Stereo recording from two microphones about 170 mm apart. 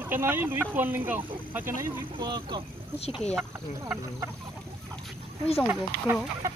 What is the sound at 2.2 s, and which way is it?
Speech, 25° right (ahead or behind).